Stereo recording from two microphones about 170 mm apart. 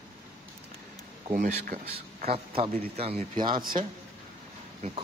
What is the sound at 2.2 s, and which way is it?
A man's voice, 35° right (ahead or behind).